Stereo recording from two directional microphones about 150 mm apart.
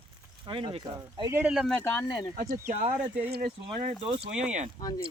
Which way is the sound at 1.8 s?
15° left (ahead or behind).